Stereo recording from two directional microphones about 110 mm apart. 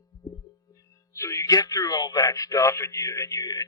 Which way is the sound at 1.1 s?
25° left (ahead or behind).